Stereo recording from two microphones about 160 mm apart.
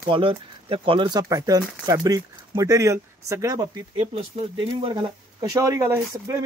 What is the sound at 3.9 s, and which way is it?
Speech, 35° right (ahead or behind).